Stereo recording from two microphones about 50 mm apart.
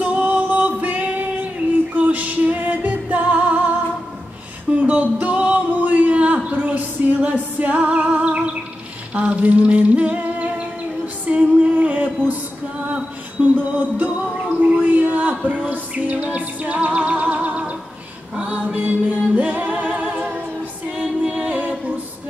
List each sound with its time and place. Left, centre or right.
0.0 s music: right
4.7 s music: right
12.8 s a sound: right
13.6 s music: right
20.9 s music: centre
21.3 s music: right